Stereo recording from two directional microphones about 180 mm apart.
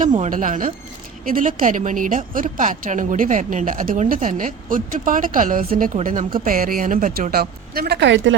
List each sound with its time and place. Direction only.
0.2 s a woman's voice: 45° right (ahead or behind); by 8.4 s 90° right